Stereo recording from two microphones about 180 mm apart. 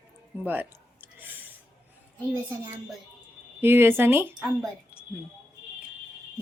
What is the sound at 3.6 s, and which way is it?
Speech, 10° right (ahead or behind).